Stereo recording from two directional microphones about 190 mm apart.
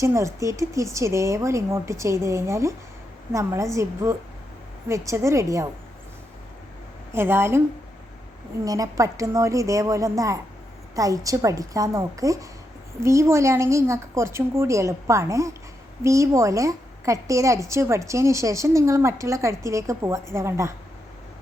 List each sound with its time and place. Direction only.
0.0 s a woman's voice: 15° right (ahead or behind)
7.1 s a woman's voice: 10° right (ahead or behind)
8.6 s a woman's voice: 20° right (ahead or behind)